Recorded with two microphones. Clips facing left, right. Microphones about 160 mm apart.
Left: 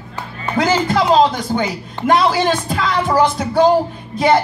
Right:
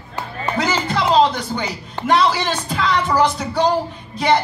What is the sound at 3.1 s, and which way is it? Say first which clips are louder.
Speech: left 3 dB; 50° left (ahead or behind).